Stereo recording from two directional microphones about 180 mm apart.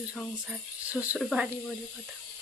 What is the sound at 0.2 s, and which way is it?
Speech, centre (ahead or behind).